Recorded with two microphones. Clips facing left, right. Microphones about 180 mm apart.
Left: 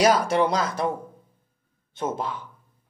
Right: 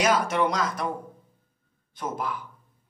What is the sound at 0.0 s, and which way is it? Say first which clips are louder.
Speech: left 3 dB; 35° left (ahead or behind).